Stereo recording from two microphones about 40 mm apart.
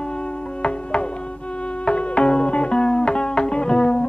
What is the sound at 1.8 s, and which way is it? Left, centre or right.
Music, left.